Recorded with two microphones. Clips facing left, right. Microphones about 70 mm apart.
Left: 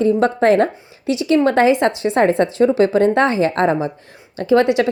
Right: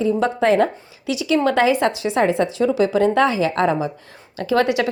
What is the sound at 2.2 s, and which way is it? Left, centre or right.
A woman's voice, left.